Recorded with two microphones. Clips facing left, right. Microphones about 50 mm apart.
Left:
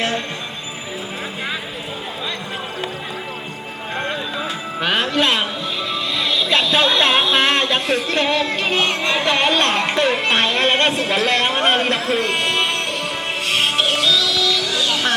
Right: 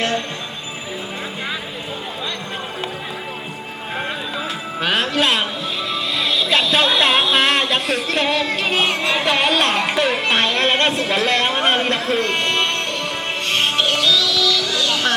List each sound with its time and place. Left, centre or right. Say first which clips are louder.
3.9 s music: left 1 dB; centre
14.3 s music: right 1 dB; left